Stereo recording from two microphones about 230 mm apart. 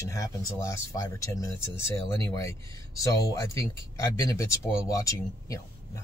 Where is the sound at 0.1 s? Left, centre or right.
Centre.